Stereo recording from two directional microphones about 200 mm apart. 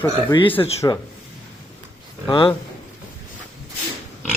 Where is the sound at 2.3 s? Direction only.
25° left (ahead or behind).